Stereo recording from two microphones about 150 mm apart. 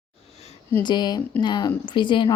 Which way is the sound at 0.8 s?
30° left (ahead or behind).